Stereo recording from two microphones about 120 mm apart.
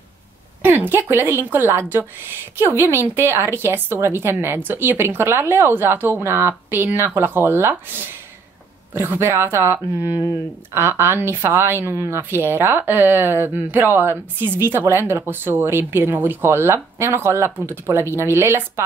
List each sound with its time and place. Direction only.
0.6 s a woman's voice: 15° right (ahead or behind)